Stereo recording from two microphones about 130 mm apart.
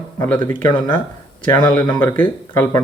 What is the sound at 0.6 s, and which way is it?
Speech, 35° left (ahead or behind).